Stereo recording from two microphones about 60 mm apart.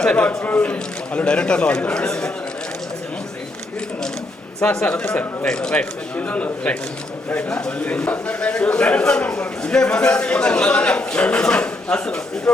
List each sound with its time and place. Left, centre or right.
0.0 s a man's voice: centre
4.6 s a man's voice: centre
6.1 s a man's voice: left